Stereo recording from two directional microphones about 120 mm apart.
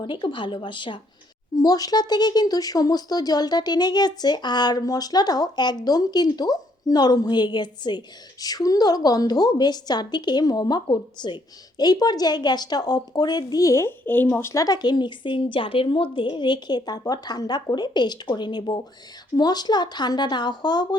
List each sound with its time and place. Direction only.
0.0 s speech: 45° left (ahead or behind)
1.5 s speech: 30° left (ahead or behind); by 14.5 s 15° left (ahead or behind)
14.5 s speech: 30° left (ahead or behind)